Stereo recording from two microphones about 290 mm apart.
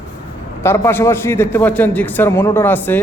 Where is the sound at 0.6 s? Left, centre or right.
Centre.